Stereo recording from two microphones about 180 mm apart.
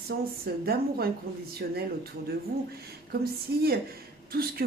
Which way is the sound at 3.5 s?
65° right (ahead or behind).